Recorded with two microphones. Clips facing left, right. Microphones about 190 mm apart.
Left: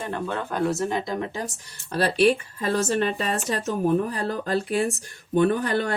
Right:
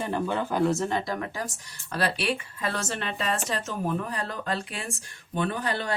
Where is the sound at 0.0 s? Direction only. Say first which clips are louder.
Right 1 dB; 10° right (ahead or behind).